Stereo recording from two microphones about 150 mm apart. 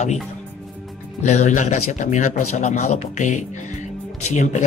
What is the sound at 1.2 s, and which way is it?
Speech, 50° left (ahead or behind).